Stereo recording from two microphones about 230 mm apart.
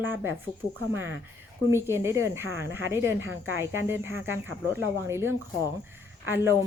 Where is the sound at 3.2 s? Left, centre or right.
Right.